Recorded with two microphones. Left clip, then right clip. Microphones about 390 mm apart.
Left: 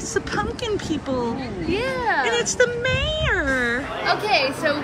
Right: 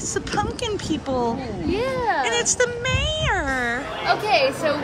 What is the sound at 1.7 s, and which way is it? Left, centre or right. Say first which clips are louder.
Speech: even; right.